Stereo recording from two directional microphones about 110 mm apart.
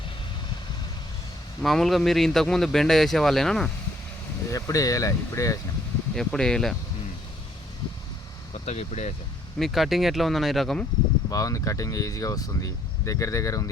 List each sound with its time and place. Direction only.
1.6 s speech: centre (ahead or behind)
4.4 s speech: 30° left (ahead or behind)
6.1 s speech: 5° left (ahead or behind)
8.6 s speech: 90° left
9.6 s speech: centre (ahead or behind)
11.3 s speech: 30° left (ahead or behind)